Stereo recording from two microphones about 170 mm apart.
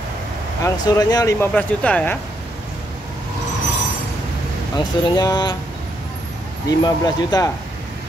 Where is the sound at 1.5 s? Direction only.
10° left (ahead or behind).